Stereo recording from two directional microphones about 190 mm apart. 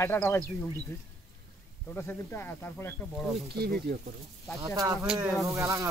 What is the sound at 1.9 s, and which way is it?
Speech, 10° left (ahead or behind).